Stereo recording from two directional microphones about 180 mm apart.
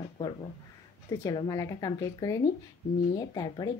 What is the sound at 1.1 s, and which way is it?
Speech, 20° left (ahead or behind).